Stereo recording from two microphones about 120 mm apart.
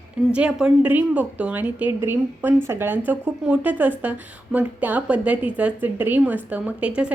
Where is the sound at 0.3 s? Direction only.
10° right (ahead or behind).